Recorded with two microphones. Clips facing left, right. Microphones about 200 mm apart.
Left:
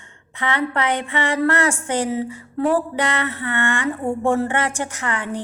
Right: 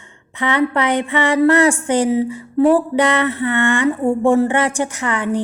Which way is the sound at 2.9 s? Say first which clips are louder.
Right 7 dB; 15° right (ahead or behind).